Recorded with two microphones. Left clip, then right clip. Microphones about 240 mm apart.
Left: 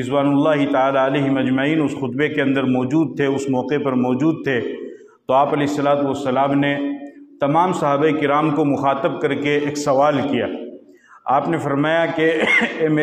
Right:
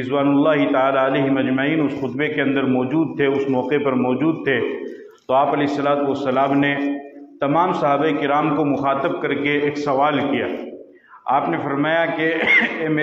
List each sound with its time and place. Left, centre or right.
0.0 s a man's voice: left